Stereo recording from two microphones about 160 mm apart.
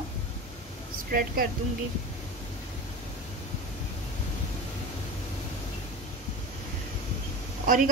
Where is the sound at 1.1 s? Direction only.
65° right (ahead or behind).